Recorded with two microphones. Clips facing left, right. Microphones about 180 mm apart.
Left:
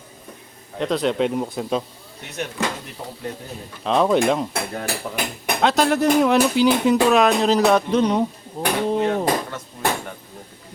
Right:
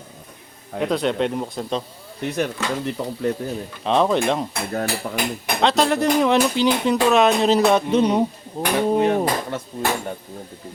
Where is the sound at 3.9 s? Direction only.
Centre (ahead or behind).